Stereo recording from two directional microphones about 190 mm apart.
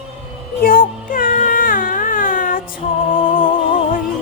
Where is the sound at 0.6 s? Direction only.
45° left (ahead or behind).